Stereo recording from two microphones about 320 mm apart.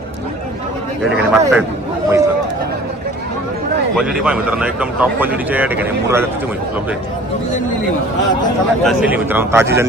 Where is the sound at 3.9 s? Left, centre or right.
Centre.